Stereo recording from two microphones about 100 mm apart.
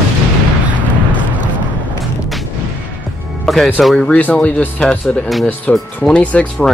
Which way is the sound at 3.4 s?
Centre (ahead or behind).